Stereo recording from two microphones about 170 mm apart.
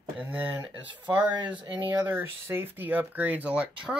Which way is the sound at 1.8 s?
10° right (ahead or behind).